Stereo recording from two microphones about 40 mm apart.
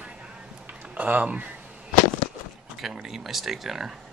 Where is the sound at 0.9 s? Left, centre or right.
Right.